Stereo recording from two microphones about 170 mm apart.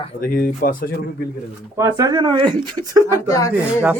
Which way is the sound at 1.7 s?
20° right (ahead or behind).